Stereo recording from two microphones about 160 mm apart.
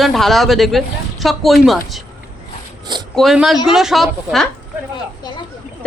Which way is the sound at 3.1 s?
Centre (ahead or behind).